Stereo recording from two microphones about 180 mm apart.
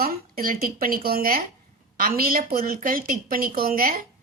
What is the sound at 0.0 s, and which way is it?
A woman's voice, 55° right (ahead or behind).